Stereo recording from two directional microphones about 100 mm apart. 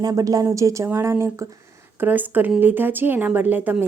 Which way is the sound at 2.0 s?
20° right (ahead or behind).